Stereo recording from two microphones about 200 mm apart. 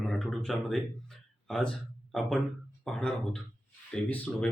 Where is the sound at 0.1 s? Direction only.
Centre (ahead or behind).